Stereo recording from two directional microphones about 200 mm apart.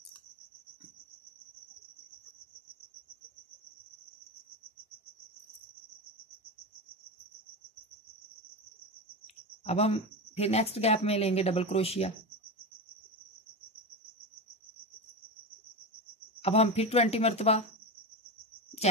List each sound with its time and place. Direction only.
9.7 s speech: 30° left (ahead or behind)
16.3 s speech: 30° left (ahead or behind)